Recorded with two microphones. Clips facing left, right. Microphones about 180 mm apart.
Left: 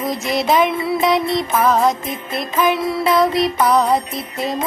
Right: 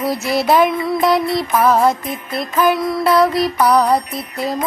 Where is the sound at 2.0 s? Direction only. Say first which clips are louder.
Right 1 dB; 25° left (ahead or behind).